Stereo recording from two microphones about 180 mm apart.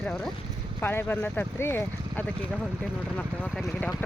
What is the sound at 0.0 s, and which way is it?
Speech, 5° left (ahead or behind).